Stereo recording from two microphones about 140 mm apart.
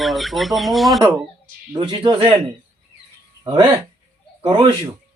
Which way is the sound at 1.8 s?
35° right (ahead or behind).